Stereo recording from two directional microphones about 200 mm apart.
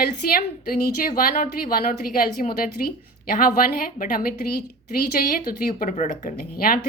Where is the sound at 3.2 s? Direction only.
45° left (ahead or behind).